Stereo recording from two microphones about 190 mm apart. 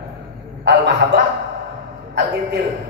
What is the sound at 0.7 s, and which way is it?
Speech, 65° right (ahead or behind).